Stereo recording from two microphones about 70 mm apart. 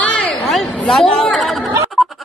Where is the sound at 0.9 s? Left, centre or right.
Centre.